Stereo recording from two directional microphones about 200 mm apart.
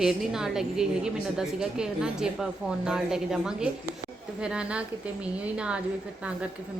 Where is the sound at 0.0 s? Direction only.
Centre (ahead or behind).